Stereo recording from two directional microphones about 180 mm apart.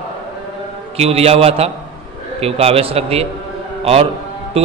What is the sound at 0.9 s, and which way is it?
A man's voice, 35° right (ahead or behind).